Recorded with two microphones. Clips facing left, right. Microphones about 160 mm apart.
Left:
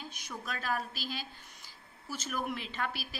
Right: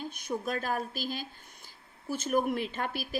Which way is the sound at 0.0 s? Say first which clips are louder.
Right 9 dB; 50° right (ahead or behind).